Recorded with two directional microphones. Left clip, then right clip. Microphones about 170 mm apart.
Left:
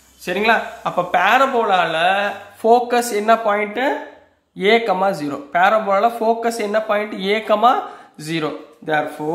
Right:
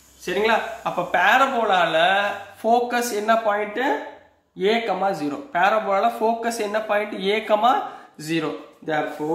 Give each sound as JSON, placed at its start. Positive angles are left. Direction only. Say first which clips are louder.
{"t": 0.2, "sound": "speech", "louder": "left 4 dB", "side_deg": 45}